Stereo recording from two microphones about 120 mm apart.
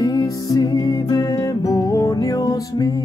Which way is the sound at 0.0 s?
30° left (ahead or behind).